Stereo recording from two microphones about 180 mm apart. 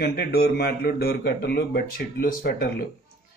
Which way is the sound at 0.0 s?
60° left (ahead or behind).